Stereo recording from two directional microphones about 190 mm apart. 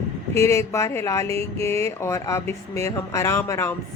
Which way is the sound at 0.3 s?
15° left (ahead or behind).